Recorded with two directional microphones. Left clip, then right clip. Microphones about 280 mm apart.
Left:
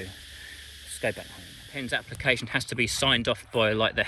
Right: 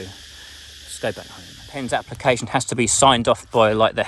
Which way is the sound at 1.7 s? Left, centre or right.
Centre.